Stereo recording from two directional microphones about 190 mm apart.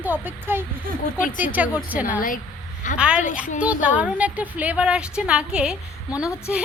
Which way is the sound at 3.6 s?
5° right (ahead or behind).